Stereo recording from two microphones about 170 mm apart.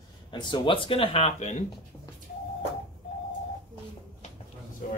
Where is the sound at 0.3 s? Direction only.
30° left (ahead or behind).